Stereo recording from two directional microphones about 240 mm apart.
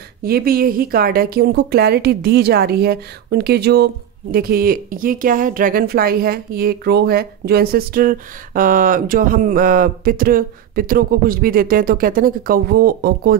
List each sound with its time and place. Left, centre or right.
0.2 s speech: right